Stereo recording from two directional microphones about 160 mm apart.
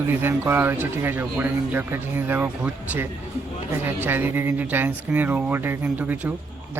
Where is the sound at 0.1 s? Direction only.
15° right (ahead or behind).